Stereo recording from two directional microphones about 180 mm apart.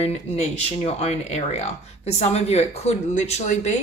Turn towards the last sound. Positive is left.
turn(degrees=40)  # may be behind; listen again after turning